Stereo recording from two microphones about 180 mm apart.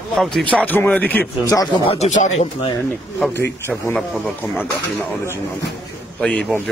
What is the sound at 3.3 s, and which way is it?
Speech, 10° left (ahead or behind).